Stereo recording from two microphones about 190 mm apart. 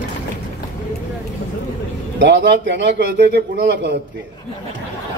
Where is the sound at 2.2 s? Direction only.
70° right (ahead or behind).